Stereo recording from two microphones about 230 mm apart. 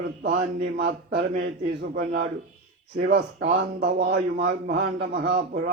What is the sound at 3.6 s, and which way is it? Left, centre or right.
A man's voice, right.